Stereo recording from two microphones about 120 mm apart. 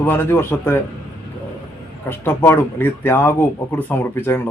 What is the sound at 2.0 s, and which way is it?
Speech, 20° left (ahead or behind).